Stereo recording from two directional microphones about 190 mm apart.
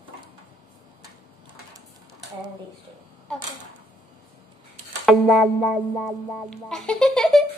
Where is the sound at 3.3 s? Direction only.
5° left (ahead or behind).